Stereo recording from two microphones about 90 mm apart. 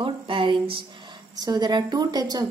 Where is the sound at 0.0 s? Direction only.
70° right (ahead or behind).